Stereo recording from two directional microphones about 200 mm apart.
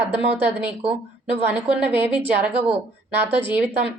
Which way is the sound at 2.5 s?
30° right (ahead or behind).